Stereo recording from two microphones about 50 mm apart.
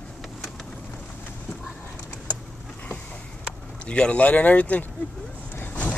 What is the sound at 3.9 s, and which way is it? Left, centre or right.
Speech, left.